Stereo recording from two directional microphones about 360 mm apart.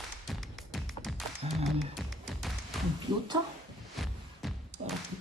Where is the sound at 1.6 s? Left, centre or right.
Centre.